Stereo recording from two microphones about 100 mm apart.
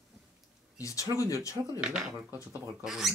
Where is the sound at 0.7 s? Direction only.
35° left (ahead or behind).